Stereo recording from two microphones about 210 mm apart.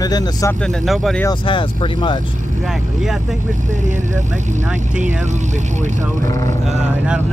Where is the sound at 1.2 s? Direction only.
20° left (ahead or behind).